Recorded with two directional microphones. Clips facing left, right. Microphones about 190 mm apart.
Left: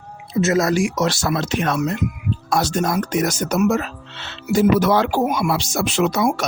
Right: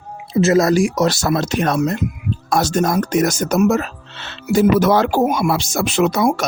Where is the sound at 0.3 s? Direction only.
30° right (ahead or behind).